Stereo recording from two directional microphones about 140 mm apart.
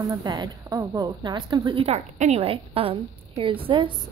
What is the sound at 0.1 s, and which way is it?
A woman's voice, 30° right (ahead or behind).